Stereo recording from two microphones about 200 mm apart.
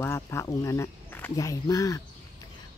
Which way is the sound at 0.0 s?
15° left (ahead or behind).